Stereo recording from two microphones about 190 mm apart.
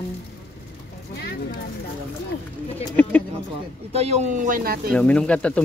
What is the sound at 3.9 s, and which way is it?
Speech, 35° right (ahead or behind).